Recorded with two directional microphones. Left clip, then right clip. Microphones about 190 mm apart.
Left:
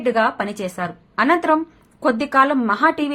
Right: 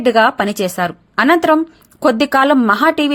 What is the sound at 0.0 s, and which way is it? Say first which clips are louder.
A woman's voice: right 6 dB; 40° right (ahead or behind).